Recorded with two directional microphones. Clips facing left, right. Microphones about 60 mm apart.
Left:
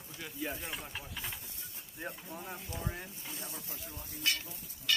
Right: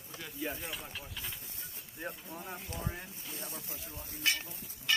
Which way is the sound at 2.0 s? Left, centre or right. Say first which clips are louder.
Even; centre.